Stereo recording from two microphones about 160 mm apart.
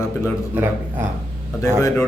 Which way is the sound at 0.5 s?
10° right (ahead or behind).